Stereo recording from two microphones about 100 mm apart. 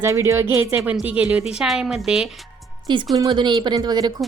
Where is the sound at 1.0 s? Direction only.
15° right (ahead or behind).